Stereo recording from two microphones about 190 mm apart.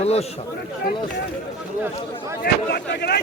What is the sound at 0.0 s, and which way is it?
Speech, 35° left (ahead or behind).